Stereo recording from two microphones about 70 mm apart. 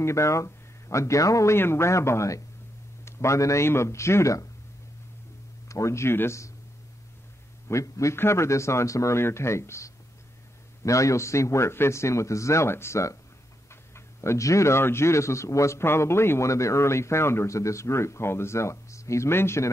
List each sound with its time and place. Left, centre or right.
0.0 s speech: left
5.7 s speech: left
7.6 s a man's voice: left